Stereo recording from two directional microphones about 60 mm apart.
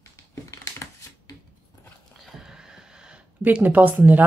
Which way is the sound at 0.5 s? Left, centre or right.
Left.